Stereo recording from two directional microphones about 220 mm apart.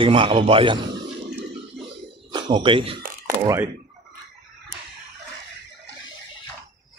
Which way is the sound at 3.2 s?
10° right (ahead or behind).